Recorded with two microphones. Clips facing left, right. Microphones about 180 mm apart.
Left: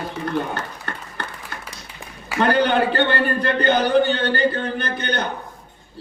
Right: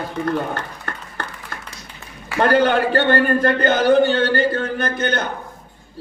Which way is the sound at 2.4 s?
45° right (ahead or behind).